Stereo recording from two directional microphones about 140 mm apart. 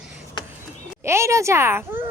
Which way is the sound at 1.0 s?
20° right (ahead or behind).